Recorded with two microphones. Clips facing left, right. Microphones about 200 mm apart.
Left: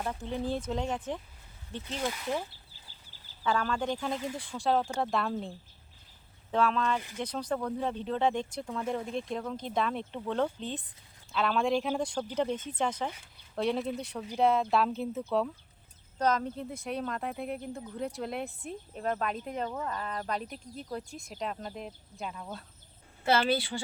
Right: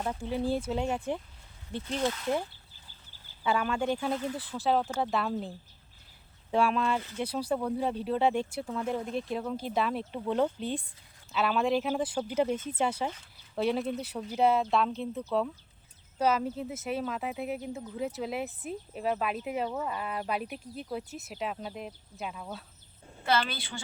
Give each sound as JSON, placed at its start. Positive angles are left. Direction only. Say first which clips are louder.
{"t": 0.0, "sound": "speech", "louder": "right 2 dB", "side_deg": -10}
{"t": 2.0, "sound": "speech", "louder": "right 3 dB", "side_deg": 10}
{"t": 3.4, "sound": "speech", "louder": "right 1 dB", "side_deg": -10}
{"t": 23.5, "sound": "a woman's voice", "louder": "left 10 dB", "side_deg": 30}